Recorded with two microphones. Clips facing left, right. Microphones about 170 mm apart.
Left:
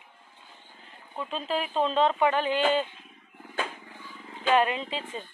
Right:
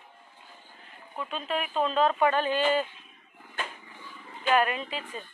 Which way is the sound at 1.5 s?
30° left (ahead or behind).